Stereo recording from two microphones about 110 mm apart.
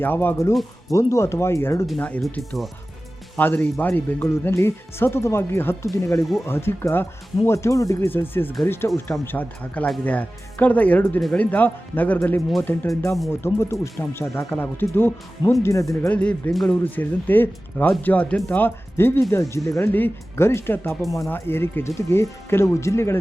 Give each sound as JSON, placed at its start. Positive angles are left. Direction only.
{"t": 0.0, "sound": "speech", "side_deg": 20}
{"t": 2.0, "sound": "speech", "side_deg": 15}
{"t": 2.4, "sound": "speech", "side_deg": 0}
{"t": 3.3, "sound": "speech", "side_deg": 15}
{"t": 15.6, "sound": "speech", "side_deg": 30}
{"t": 16.0, "sound": "speech", "side_deg": 10}
{"t": 18.6, "sound": "speech", "side_deg": 20}